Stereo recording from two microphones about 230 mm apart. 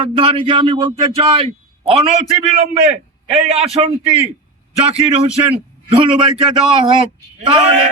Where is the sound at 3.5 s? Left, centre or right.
Right.